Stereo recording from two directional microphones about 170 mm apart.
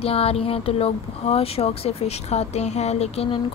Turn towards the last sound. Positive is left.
turn(degrees=35)  # may be behind; listen again after turning